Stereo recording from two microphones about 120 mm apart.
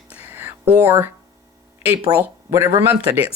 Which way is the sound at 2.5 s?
25° right (ahead or behind).